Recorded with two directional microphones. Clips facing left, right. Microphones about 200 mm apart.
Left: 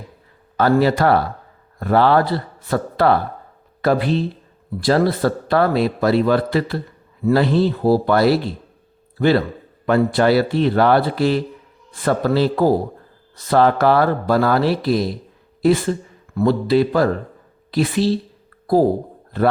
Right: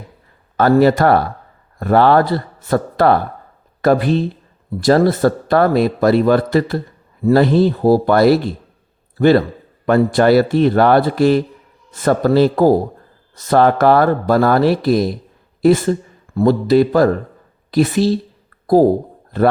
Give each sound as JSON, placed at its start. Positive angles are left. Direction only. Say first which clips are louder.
{"t": 0.5, "sound": "a man's voice", "louder": "right 4 dB", "side_deg": -50}